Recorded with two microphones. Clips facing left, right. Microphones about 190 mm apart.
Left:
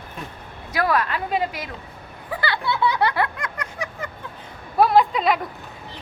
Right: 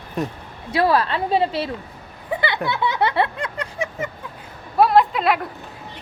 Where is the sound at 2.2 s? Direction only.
20° right (ahead or behind).